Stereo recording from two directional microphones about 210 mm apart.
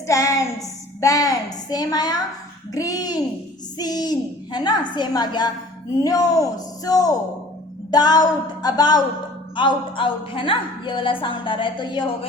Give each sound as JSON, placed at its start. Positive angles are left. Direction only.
{"t": 0.1, "sound": "a woman's voice", "side_deg": 15}